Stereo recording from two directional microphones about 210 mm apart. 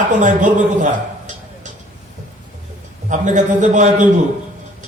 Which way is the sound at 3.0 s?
35° right (ahead or behind).